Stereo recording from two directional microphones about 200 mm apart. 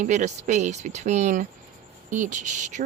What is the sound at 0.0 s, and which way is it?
Speech, 40° right (ahead or behind).